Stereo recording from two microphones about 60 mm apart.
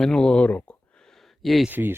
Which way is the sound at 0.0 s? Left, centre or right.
Centre.